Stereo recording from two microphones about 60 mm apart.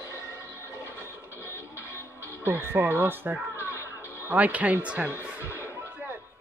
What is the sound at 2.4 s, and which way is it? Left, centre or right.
Speech, right.